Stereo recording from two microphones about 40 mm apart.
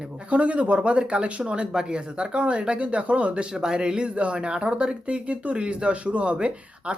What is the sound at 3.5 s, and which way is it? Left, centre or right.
Speech, centre.